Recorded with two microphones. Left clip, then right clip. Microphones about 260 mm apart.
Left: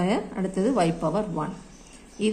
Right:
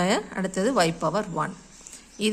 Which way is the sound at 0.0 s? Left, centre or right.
Right.